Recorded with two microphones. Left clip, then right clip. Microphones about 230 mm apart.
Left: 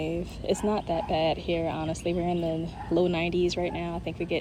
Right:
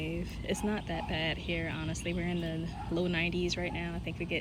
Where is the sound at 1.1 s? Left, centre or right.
Centre.